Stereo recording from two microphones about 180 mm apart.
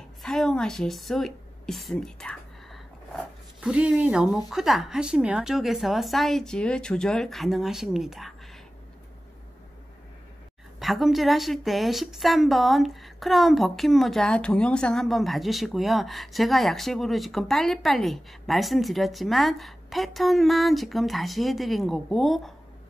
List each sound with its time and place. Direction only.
0.2 s a sound: centre (ahead or behind)
3.6 s a woman's voice: 5° right (ahead or behind)
10.8 s a woman's voice: centre (ahead or behind)